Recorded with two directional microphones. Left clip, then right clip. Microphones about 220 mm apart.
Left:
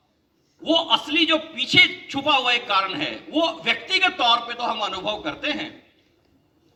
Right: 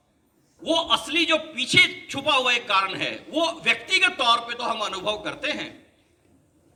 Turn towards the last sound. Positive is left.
turn(degrees=-35)  # may be behind; listen again after turning